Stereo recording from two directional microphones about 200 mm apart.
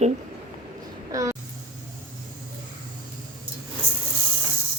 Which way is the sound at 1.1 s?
15° right (ahead or behind).